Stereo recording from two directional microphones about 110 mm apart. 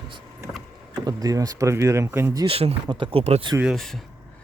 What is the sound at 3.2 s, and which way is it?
Speech, 70° right (ahead or behind).